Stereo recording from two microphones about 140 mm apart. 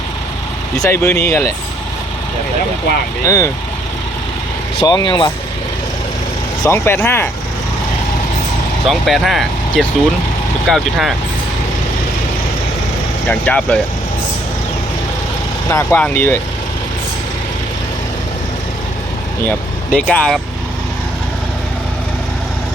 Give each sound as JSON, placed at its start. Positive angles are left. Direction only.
{"t": 0.8, "sound": "speech", "side_deg": 20}
{"t": 3.2, "sound": "speech", "side_deg": 20}
{"t": 4.8, "sound": "speech", "side_deg": 30}
{"t": 6.7, "sound": "speech", "side_deg": 15}
{"t": 8.9, "sound": "speech", "side_deg": 0}
{"t": 13.2, "sound": "speech", "side_deg": 10}
{"t": 15.7, "sound": "speech", "side_deg": 15}
{"t": 19.5, "sound": "speech", "side_deg": 10}